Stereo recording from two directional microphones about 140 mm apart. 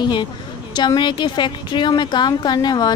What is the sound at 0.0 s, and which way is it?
A woman's voice, 35° left (ahead or behind).